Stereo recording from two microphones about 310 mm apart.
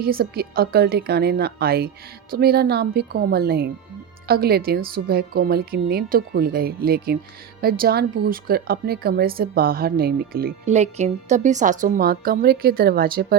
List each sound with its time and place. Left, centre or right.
0.0 s speech: right